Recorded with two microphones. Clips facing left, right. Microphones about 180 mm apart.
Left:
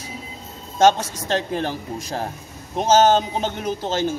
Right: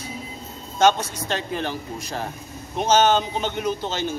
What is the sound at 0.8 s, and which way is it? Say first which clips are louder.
A man's voice: left 2 dB; 40° left (ahead or behind).